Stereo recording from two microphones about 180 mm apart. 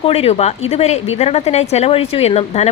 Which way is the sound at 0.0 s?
35° left (ahead or behind).